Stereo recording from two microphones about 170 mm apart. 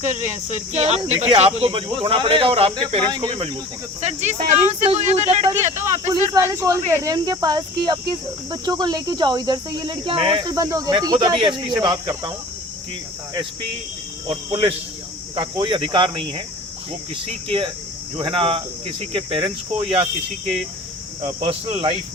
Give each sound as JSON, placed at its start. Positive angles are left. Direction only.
{"t": 0.4, "sound": "speech", "side_deg": -45}
{"t": 4.0, "sound": "speech", "side_deg": -45}
{"t": 5.8, "sound": "speech", "side_deg": -15}
{"t": 14.3, "sound": "speech", "side_deg": -30}
{"t": 18.2, "sound": "speech", "side_deg": -30}
{"t": 21.2, "sound": "speech", "side_deg": -40}